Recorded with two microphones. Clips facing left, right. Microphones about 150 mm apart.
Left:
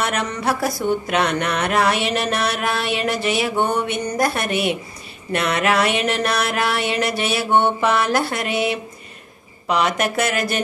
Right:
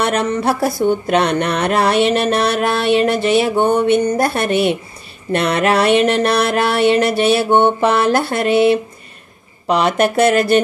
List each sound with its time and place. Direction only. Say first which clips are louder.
0.0 s speech: right 6 dB; 30° right (ahead or behind)
5.3 s a sound: right 4 dB; 30° right (ahead or behind)
9.7 s speech: right 5 dB; 30° right (ahead or behind)